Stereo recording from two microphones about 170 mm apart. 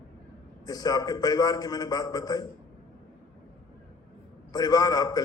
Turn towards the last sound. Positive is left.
turn(degrees=25)  # may be behind; listen again after turning